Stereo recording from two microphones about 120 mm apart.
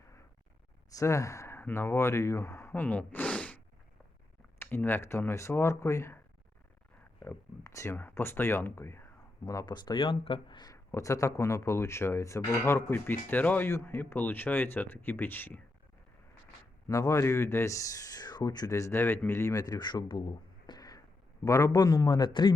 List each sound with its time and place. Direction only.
0.9 s speech: 25° left (ahead or behind); by 3.6 s 10° left (ahead or behind)
4.6 s speech: 15° left (ahead or behind)
7.2 s speech: 20° left (ahead or behind)
9.5 s speech: 35° left (ahead or behind)
10.6 s speech: 30° left (ahead or behind)
16.9 s speech: 25° left (ahead or behind)